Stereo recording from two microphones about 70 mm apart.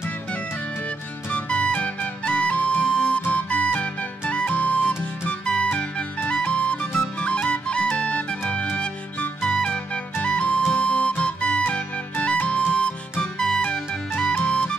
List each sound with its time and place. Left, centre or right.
1.3 s music: centre